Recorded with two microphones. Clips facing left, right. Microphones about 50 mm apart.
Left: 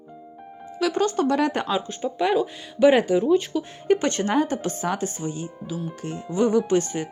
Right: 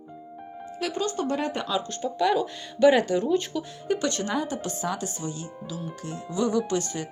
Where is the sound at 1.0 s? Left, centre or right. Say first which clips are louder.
Left 6 dB; left.